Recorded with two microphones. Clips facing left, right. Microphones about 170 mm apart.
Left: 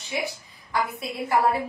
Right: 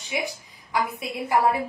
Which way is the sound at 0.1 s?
15° right (ahead or behind).